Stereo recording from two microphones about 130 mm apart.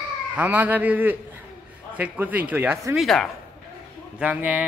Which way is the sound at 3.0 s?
Centre (ahead or behind).